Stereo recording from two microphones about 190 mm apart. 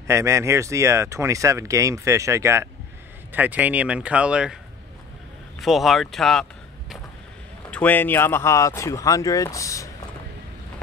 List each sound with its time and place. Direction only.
0.0 s speech: 15° right (ahead or behind)
5.6 s speech: centre (ahead or behind)
7.7 s speech: 10° left (ahead or behind)